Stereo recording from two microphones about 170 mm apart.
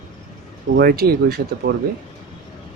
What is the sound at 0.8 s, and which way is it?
Speech, 65° right (ahead or behind).